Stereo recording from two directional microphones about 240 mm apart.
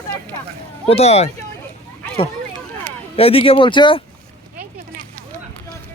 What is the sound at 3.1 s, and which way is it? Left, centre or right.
Speech, left.